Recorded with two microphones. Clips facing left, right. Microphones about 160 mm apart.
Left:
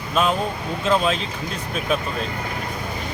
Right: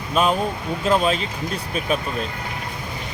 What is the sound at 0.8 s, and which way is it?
Speech, 5° right (ahead or behind).